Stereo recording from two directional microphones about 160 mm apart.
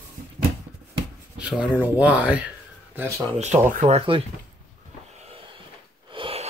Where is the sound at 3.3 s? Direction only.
45° right (ahead or behind).